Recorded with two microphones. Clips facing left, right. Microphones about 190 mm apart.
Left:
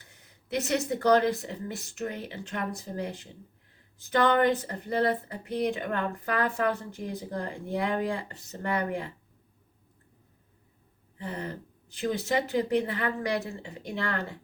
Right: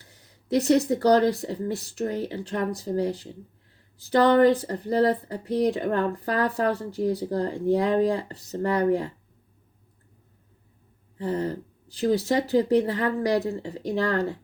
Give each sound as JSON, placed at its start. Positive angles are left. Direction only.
{"t": 0.0, "sound": "speech", "side_deg": -35}
{"t": 11.2, "sound": "speech", "side_deg": -40}